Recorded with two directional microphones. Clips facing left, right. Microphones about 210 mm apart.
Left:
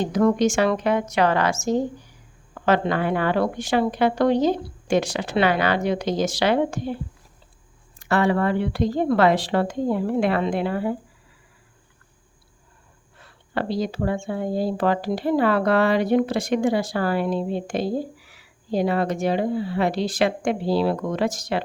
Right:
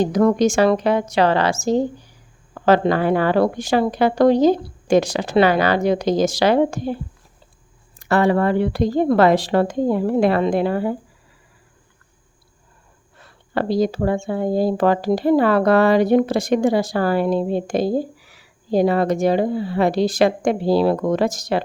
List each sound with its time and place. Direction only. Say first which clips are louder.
0.0 s speech: right 3 dB; 40° right (ahead or behind)
7.9 s speech: right 4 dB; 40° right (ahead or behind)
13.5 s speech: right 6 dB; 40° right (ahead or behind)